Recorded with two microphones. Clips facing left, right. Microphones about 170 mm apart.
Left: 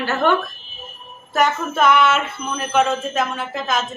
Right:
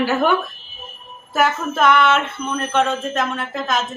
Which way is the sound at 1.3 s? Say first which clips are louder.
Even; 5° right (ahead or behind).